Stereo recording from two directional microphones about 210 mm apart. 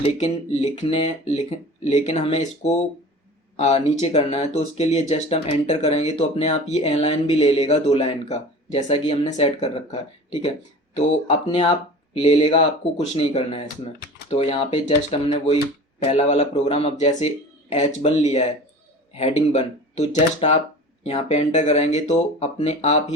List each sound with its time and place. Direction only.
0.0 s speech: 30° left (ahead or behind)